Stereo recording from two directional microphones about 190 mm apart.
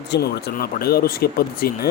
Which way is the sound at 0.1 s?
55° left (ahead or behind).